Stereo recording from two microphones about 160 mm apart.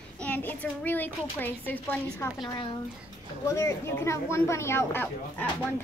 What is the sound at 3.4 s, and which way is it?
A woman's voice, 20° left (ahead or behind).